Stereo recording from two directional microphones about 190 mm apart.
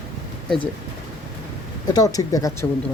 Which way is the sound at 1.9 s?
20° left (ahead or behind).